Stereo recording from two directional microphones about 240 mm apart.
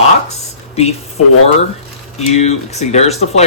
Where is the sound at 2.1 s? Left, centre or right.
Left.